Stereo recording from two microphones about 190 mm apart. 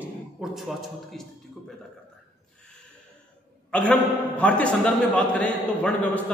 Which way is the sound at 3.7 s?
5° left (ahead or behind).